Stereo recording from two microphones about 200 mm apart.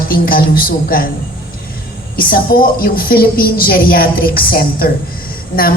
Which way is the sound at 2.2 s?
45° left (ahead or behind).